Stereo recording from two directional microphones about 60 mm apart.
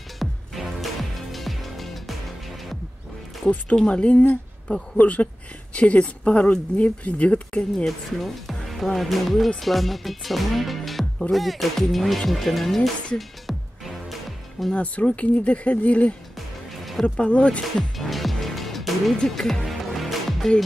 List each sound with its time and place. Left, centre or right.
0.2 s music: centre
3.7 s speech: centre
7.7 s speech: centre
13.5 s music: centre
14.7 s speech: left
16.3 s music: centre
17.0 s speech: left
17.9 s music: centre